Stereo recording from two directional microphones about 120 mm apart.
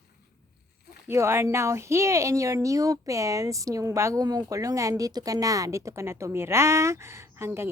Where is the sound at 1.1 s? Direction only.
20° right (ahead or behind).